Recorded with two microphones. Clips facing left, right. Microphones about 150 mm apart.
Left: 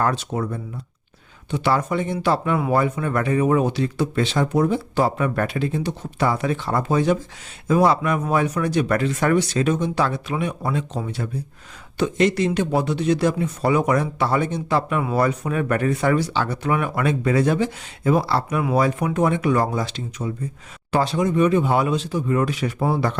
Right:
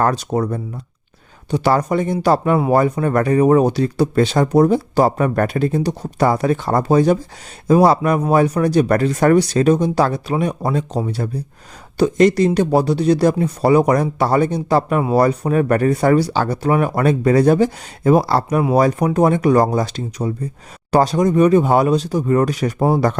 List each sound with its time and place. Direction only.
0.0 s speech: 40° right (ahead or behind)